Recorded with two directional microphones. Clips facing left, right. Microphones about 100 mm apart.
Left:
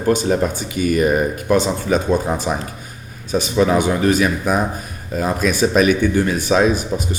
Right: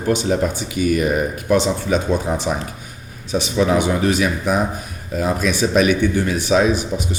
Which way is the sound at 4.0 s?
45° left (ahead or behind).